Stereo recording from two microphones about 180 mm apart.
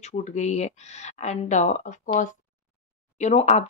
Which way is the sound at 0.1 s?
40° left (ahead or behind).